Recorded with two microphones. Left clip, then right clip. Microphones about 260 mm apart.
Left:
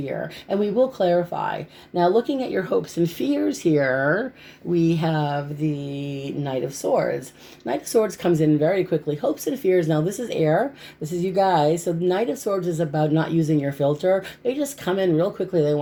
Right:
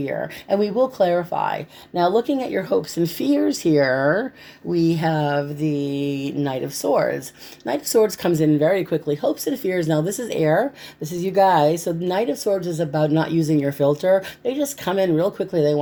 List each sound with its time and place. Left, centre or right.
0.5 s speech: right